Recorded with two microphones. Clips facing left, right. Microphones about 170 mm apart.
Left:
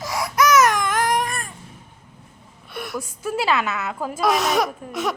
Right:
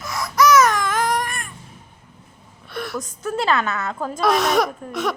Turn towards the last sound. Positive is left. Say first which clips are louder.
# right 1 dB
turn(degrees=5)  # may be behind; listen again after turning